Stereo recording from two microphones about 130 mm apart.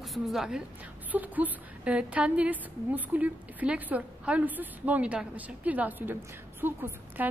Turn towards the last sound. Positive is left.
turn(degrees=-15)  # may be behind; listen again after turning